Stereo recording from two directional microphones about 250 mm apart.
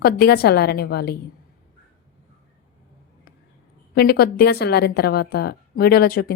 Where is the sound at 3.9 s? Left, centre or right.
Left.